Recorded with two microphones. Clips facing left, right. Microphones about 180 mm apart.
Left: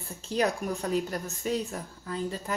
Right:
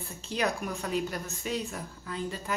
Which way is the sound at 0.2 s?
35° left (ahead or behind).